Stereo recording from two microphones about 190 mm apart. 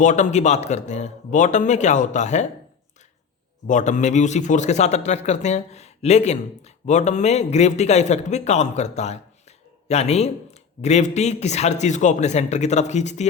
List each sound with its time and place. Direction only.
0.0 s a man's voice: 40° left (ahead or behind)
3.7 s a man's voice: 40° left (ahead or behind)